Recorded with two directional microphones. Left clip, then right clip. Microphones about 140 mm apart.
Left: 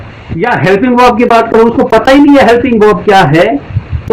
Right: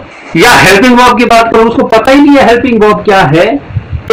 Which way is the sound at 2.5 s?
20° right (ahead or behind).